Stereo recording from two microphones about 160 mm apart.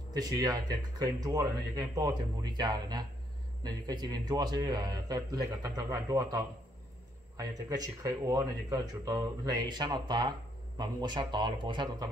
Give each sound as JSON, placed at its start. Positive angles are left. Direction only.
{"t": 0.1, "sound": "speech", "side_deg": -25}